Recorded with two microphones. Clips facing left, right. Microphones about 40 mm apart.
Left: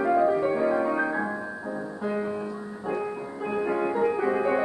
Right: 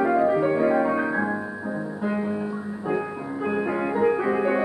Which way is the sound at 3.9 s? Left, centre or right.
Centre.